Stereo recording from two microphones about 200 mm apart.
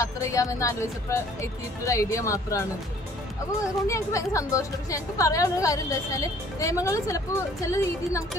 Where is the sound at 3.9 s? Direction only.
15° left (ahead or behind).